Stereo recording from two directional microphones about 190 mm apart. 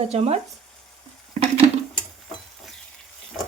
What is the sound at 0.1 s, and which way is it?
Speech, 35° right (ahead or behind).